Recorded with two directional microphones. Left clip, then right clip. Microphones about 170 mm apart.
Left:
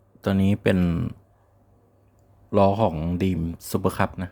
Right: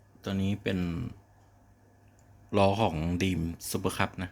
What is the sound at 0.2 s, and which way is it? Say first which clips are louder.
Speech: left 10 dB; 50° left (ahead or behind).